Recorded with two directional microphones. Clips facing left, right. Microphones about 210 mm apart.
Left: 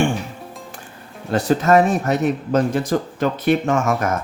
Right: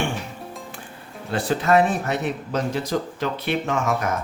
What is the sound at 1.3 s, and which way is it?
Speech, 45° left (ahead or behind).